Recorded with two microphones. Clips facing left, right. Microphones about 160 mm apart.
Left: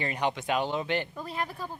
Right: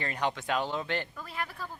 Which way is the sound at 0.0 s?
10° left (ahead or behind).